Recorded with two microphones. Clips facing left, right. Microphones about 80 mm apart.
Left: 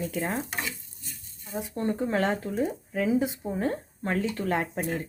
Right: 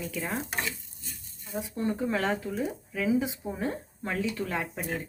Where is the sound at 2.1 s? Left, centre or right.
Left.